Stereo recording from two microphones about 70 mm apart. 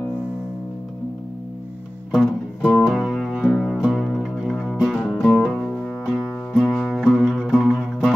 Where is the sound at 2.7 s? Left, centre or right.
Centre.